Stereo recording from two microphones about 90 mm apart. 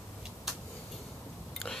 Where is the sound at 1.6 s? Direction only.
15° left (ahead or behind).